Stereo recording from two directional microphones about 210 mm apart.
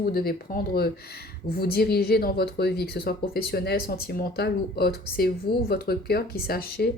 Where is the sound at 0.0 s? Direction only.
45° left (ahead or behind).